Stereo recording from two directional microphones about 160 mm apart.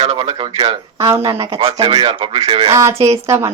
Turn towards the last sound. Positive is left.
turn(degrees=-20)  # may be behind; listen again after turning